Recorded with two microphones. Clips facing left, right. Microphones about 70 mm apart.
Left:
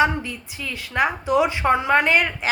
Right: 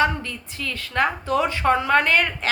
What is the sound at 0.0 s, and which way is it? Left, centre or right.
Speech, centre.